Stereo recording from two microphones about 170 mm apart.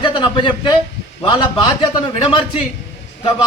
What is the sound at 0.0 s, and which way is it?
Speech, 30° left (ahead or behind).